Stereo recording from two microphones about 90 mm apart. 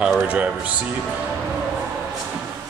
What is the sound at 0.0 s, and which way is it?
Speech, 10° right (ahead or behind).